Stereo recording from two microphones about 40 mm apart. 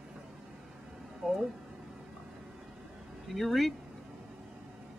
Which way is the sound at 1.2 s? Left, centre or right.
Right.